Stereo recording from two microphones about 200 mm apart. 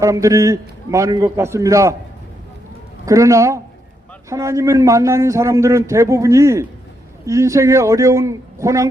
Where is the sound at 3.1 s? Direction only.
15° right (ahead or behind).